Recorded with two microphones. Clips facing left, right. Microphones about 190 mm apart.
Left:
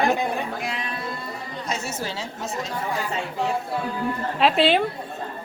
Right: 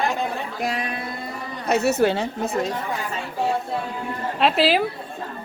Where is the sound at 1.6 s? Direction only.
65° right (ahead or behind).